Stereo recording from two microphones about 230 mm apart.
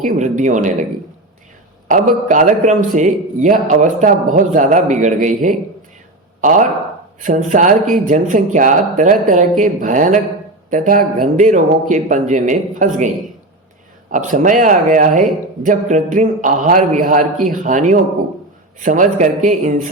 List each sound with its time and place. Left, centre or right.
0.0 s a man's voice: right
2.2 s a man's voice: right
14.1 s a man's voice: right